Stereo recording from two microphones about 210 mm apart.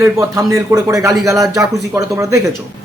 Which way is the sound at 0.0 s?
15° right (ahead or behind).